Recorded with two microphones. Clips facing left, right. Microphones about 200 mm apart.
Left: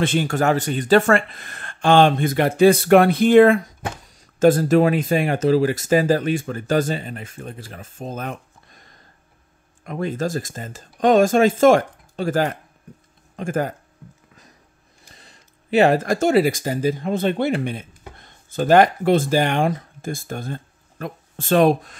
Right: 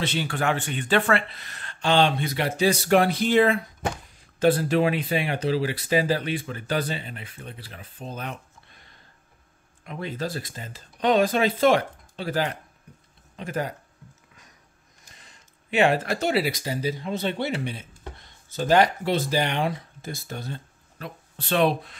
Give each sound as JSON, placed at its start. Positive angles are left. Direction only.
{"t": 0.0, "sound": "speech", "side_deg": 50}
{"t": 15.1, "sound": "speech", "side_deg": 35}